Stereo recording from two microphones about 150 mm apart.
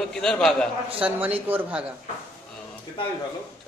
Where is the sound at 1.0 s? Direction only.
10° right (ahead or behind).